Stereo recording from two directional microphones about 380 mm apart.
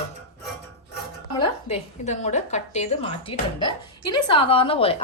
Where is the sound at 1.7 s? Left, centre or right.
Centre.